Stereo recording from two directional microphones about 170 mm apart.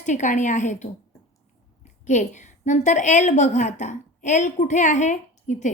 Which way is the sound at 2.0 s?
45° left (ahead or behind).